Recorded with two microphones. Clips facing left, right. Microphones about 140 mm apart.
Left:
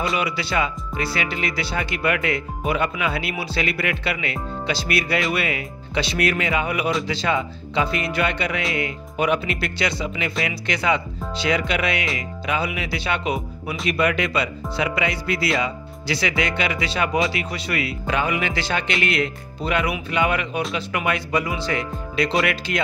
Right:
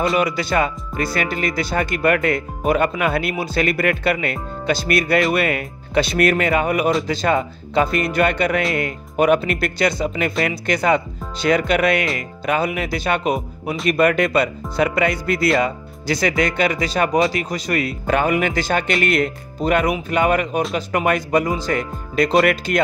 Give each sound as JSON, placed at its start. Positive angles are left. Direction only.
{"t": 0.2, "sound": "speech", "side_deg": -45}